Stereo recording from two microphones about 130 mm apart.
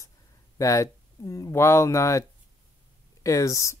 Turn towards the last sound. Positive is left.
turn(degrees=25)  # may be behind; listen again after turning